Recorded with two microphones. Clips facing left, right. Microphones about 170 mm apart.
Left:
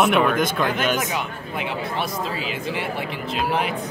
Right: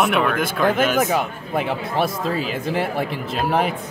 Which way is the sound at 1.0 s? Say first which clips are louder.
Right 6 dB; 50° right (ahead or behind).